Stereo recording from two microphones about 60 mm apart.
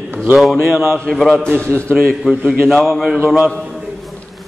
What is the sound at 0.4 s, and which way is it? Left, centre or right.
Speech, centre.